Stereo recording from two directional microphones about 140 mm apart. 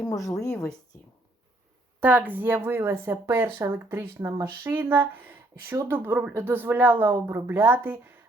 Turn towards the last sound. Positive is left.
turn(degrees=-15)  # may be behind; listen again after turning